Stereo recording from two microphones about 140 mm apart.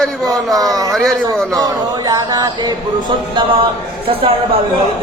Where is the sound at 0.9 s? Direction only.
Centre (ahead or behind).